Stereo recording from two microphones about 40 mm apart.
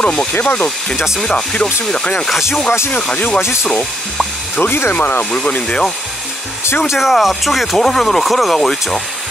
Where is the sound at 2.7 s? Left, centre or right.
Left.